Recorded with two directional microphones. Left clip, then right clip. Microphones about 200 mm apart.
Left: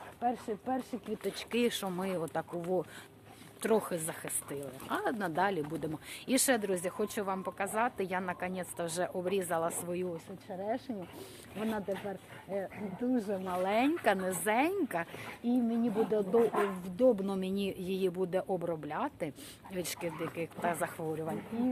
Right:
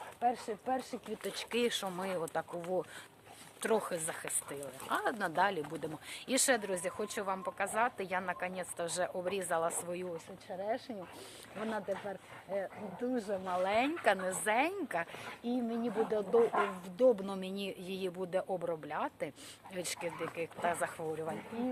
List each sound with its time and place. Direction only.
0.2 s speech: centre (ahead or behind)
3.6 s speech: 5° left (ahead or behind)
16.4 s speech: 30° left (ahead or behind)
16.8 s speech: 5° left (ahead or behind)